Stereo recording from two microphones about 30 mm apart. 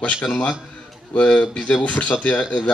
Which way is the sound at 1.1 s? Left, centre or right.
Left.